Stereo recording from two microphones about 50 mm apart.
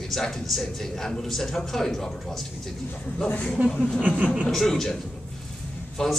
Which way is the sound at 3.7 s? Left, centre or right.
Centre.